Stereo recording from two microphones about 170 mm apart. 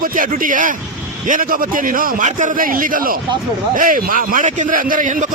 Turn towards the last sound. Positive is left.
turn(degrees=-55)  # may be behind; listen again after turning